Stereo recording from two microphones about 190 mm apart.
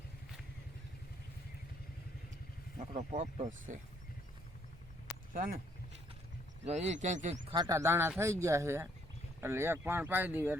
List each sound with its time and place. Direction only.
2.9 s speech: 40° right (ahead or behind)
5.3 s speech: 45° right (ahead or behind)
6.7 s speech: 35° right (ahead or behind)
7.5 s speech: 20° right (ahead or behind)